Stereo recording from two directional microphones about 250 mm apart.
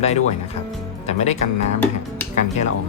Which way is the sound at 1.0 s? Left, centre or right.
Left.